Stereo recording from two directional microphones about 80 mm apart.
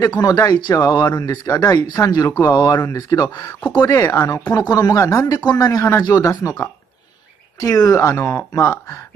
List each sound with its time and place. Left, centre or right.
0.2 s speech: left
5.4 s speech: left
7.6 s speech: left